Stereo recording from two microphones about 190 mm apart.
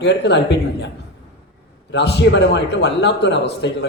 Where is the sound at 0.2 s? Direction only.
65° left (ahead or behind).